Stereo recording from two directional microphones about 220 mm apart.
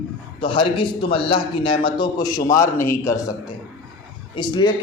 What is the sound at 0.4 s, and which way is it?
A man's voice, 25° left (ahead or behind).